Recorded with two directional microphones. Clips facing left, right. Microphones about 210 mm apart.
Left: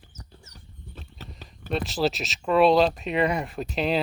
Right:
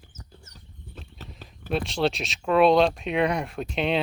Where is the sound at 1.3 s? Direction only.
Centre (ahead or behind).